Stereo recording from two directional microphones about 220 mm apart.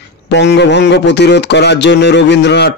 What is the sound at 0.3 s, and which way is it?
Speech, 50° left (ahead or behind).